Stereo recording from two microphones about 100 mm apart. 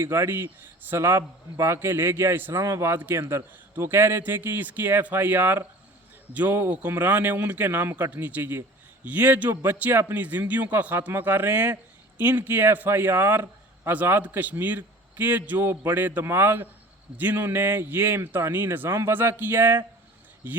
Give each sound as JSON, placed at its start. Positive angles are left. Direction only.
{"t": 0.0, "sound": "a man's voice", "side_deg": -25}